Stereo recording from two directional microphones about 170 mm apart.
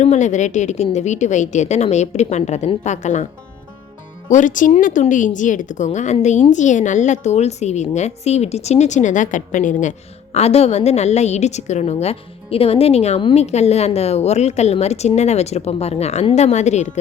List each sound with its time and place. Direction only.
0.0 s speech: 45° left (ahead or behind)
4.3 s speech: 50° left (ahead or behind)
10.3 s a woman's voice: 40° left (ahead or behind)